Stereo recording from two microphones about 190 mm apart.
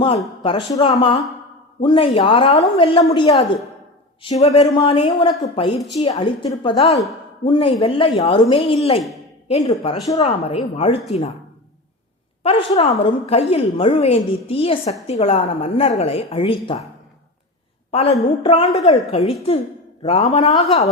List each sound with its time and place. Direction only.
0.4 s a woman's voice: 25° left (ahead or behind)
12.4 s a woman's voice: 30° left (ahead or behind)
17.9 s a woman's voice: 30° left (ahead or behind)